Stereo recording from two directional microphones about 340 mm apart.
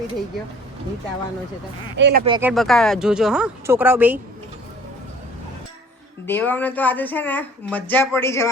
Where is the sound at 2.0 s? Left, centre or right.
Right.